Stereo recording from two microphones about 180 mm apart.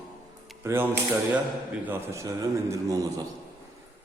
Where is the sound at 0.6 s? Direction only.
10° right (ahead or behind).